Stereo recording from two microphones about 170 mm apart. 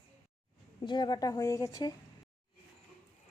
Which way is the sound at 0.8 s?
25° left (ahead or behind).